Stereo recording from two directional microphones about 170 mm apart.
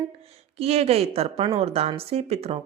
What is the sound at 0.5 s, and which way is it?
Speech, 35° right (ahead or behind).